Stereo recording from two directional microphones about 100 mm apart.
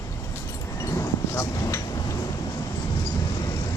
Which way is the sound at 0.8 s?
30° left (ahead or behind).